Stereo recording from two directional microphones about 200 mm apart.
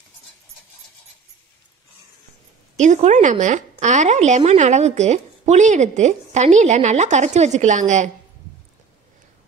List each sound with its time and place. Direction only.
2.8 s a woman's voice: 35° right (ahead or behind)